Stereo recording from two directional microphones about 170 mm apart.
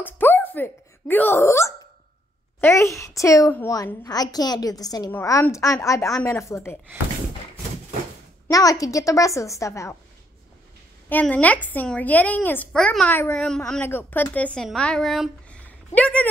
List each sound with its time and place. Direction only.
0.0 s a woman's voice: 10° left (ahead or behind)
8.5 s a woman's voice: 20° left (ahead or behind)
11.1 s speech: 10° left (ahead or behind)